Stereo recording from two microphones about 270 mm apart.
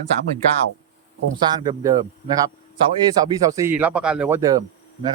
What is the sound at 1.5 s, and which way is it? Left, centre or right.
Speech, centre.